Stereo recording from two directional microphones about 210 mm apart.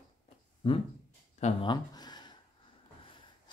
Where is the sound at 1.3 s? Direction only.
30° left (ahead or behind).